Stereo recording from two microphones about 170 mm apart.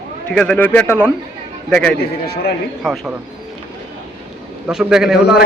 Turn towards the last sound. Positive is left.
turn(degrees=-5)  # may be behind; listen again after turning